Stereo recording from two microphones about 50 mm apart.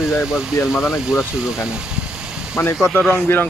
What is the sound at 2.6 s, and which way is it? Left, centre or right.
Speech, left.